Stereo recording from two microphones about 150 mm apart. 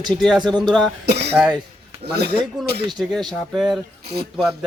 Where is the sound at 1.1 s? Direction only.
90° right.